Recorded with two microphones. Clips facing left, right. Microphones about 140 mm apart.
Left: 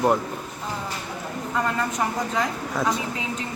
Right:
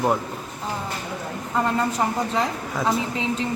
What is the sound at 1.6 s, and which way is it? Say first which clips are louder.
A woman's voice: right 3 dB; 30° right (ahead or behind).